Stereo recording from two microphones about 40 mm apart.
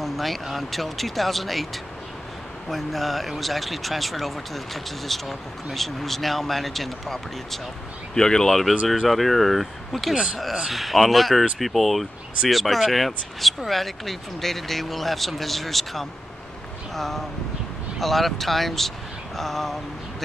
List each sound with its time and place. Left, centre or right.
0.0 s speech: centre
2.7 s speech: centre
8.1 s speech: centre
8.5 s speech: centre
10.1 s speech: right
10.7 s speech: centre